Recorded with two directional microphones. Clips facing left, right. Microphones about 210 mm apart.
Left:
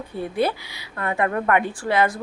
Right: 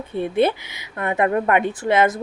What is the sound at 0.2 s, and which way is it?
A woman's voice, 20° right (ahead or behind).